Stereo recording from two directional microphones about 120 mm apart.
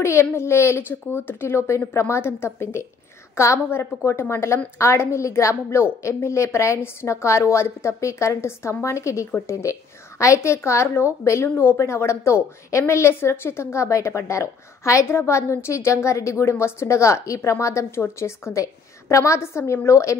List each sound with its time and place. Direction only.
0.0 s a woman's voice: 20° left (ahead or behind)